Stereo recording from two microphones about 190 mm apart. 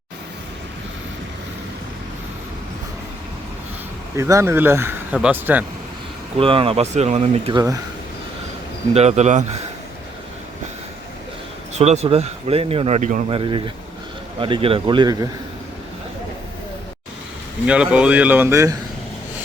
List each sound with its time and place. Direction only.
4.2 s speech: 15° right (ahead or behind)
6.3 s speech: 30° right (ahead or behind)
8.9 s speech: 35° right (ahead or behind)
11.7 s speech: 35° right (ahead or behind)
13.3 s speech: 25° right (ahead or behind)
17.7 s speech: 5° right (ahead or behind)